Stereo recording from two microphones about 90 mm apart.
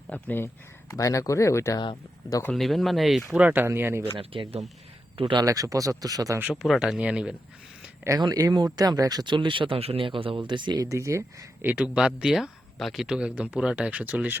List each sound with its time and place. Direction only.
0.1 s speech: 20° left (ahead or behind)
0.9 s speech: 35° left (ahead or behind)
2.5 s speech: centre (ahead or behind)
3.3 s speech: 20° right (ahead or behind)
4.0 s speech: 90° right
5.1 s speech: 60° right (ahead or behind)
5.4 s speech: 40° right (ahead or behind)
6.5 s speech: 5° right (ahead or behind)
8.3 s speech: 40° right (ahead or behind); by 10.8 s 55° right (ahead or behind)
10.8 s speech: 35° right (ahead or behind)
11.6 s speech: 20° right (ahead or behind)
11.9 s speech: 10° right (ahead or behind)